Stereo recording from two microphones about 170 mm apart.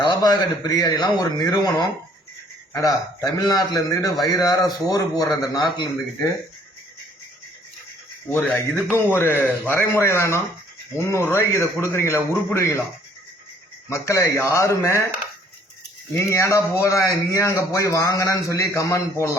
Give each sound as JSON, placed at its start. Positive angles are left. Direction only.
{"t": 0.0, "sound": "a man's voice", "side_deg": 25}
{"t": 8.4, "sound": "a man's voice", "side_deg": 5}
{"t": 13.9, "sound": "speech", "side_deg": 15}
{"t": 16.1, "sound": "speech", "side_deg": 15}